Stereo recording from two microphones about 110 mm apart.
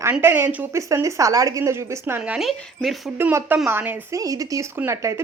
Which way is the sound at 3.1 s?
20° right (ahead or behind).